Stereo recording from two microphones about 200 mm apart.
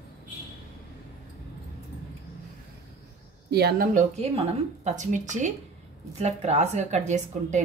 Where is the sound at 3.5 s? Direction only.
50° right (ahead or behind).